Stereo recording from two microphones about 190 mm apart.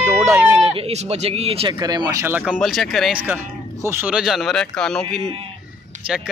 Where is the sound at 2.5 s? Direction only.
Centre (ahead or behind).